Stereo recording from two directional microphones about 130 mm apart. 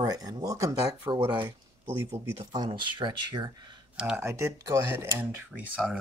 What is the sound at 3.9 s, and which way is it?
Speech, 5° right (ahead or behind).